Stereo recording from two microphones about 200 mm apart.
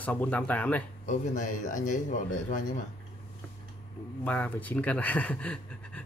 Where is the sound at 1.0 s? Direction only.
40° left (ahead or behind).